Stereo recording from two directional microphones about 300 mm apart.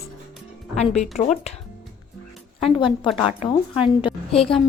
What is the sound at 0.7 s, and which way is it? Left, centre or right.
Speech, left.